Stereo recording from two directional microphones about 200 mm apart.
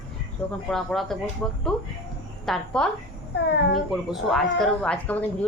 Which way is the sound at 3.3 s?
60° left (ahead or behind).